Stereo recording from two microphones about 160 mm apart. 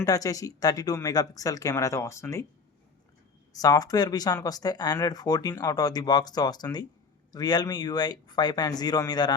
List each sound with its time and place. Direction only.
0.0 s speech: 20° left (ahead or behind)
3.5 s speech: 25° left (ahead or behind)